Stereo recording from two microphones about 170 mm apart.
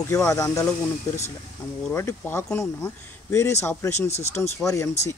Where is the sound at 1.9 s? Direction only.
15° left (ahead or behind).